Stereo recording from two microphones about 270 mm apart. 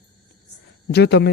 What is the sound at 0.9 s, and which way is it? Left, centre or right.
Speech, left.